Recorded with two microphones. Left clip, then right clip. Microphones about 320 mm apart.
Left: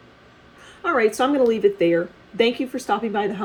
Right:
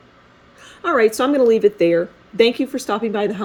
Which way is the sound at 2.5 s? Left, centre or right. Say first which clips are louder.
Right 3 dB; right.